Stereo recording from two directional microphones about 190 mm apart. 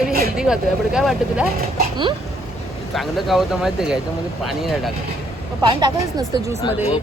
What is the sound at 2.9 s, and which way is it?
Speech, centre (ahead or behind).